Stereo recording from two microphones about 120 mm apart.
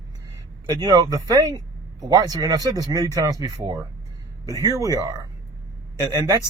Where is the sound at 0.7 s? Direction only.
30° right (ahead or behind).